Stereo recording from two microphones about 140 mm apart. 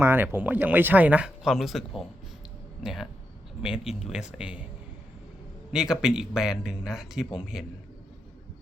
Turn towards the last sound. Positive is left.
turn(degrees=-5)  # may be behind; listen again after turning